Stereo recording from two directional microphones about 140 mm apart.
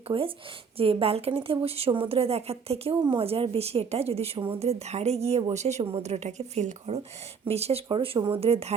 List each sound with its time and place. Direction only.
0.1 s a woman's voice: 45° right (ahead or behind)